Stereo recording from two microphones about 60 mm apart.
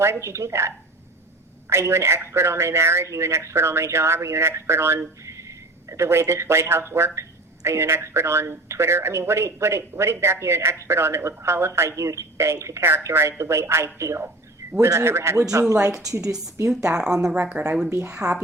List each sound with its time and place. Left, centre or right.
0.0 s speech: right
1.7 s speech: right
14.6 s a sound: right
15.0 s speech: right
15.9 s speech: centre
16.6 s speech: right
16.9 s speech: centre
17.3 s speech: right
17.7 s speech: centre
17.9 s speech: right